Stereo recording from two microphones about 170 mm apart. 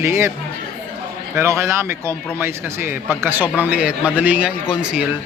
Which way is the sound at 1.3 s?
15° right (ahead or behind).